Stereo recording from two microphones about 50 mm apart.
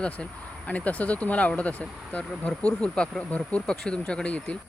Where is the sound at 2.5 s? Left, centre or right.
Centre.